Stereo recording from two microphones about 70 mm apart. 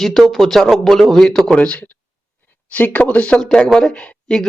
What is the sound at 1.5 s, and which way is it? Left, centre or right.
Speech, centre.